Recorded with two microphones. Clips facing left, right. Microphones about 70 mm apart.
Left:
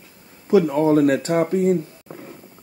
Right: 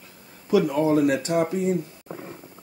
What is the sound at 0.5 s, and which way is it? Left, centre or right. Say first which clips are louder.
Speech: left 4 dB; left.